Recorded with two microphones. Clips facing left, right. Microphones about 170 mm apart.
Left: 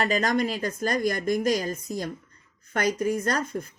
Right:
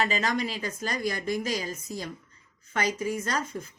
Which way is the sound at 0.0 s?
50° left (ahead or behind).